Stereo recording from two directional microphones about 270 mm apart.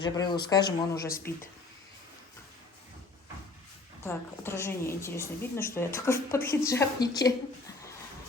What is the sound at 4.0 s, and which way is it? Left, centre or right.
A woman's voice, centre.